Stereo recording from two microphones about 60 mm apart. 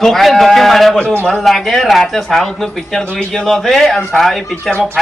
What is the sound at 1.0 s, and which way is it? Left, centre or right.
Speech, left.